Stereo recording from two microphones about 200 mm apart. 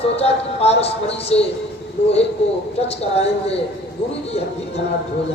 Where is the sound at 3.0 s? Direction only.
30° left (ahead or behind).